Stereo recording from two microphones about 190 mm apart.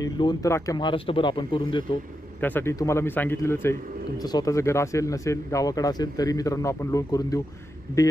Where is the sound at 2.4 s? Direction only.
10° left (ahead or behind).